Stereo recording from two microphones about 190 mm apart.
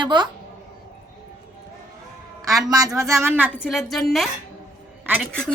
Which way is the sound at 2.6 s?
20° right (ahead or behind).